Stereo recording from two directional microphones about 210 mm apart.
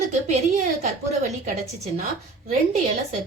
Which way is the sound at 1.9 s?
35° right (ahead or behind).